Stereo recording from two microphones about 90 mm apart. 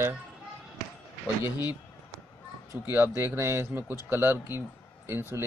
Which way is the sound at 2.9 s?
25° right (ahead or behind).